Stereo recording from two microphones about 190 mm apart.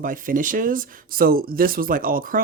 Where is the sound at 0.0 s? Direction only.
45° right (ahead or behind).